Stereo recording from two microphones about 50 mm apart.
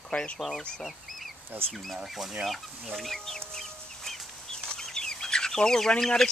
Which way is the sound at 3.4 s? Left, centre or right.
Centre.